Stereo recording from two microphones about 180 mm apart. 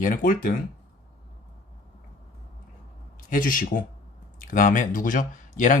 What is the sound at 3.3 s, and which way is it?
Speech, 50° left (ahead or behind).